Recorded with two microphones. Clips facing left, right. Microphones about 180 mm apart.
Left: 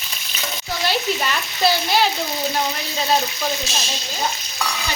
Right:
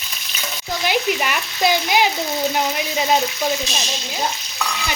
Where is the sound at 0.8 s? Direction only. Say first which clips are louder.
Right 2 dB; 15° right (ahead or behind).